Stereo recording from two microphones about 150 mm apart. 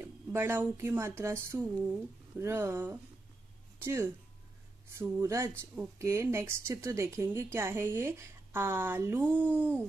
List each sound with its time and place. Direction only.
0.0 s a woman's voice: 15° right (ahead or behind)